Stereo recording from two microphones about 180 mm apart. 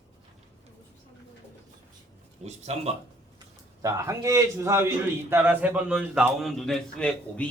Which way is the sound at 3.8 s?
15° right (ahead or behind).